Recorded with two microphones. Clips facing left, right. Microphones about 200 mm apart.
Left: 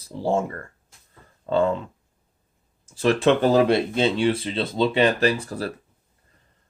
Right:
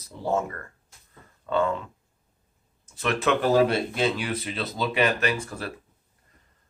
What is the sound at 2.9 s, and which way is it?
Speech, 30° left (ahead or behind).